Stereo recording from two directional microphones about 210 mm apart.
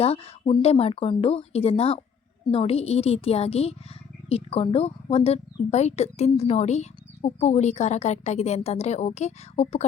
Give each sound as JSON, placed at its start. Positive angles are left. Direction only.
{"t": 0.0, "sound": "a woman's voice", "side_deg": 25}